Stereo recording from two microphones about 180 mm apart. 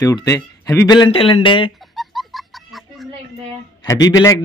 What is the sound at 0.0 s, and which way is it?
A man's voice, 20° left (ahead or behind).